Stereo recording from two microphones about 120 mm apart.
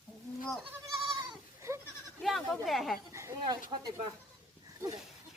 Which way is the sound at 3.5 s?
35° right (ahead or behind).